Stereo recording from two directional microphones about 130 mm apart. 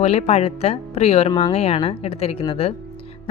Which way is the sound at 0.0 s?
55° left (ahead or behind).